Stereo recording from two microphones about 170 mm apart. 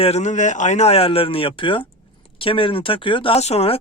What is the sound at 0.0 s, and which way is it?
Speech, 40° left (ahead or behind).